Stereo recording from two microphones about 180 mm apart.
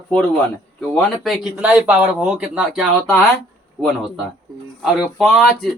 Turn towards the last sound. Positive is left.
turn(degrees=0)  # may be behind; listen again after turning